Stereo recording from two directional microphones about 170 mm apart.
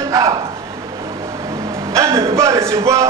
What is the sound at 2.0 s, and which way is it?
A man's voice, 15° right (ahead or behind).